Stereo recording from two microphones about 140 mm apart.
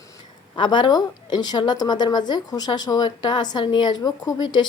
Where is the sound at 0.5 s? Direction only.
35° left (ahead or behind).